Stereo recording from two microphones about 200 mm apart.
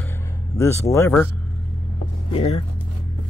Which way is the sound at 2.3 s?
25° left (ahead or behind).